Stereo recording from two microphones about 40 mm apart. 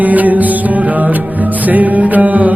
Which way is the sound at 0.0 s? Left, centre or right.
Right.